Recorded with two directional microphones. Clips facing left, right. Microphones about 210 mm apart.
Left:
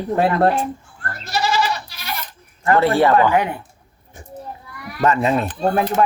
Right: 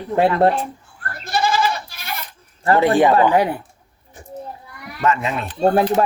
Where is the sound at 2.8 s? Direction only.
15° right (ahead or behind).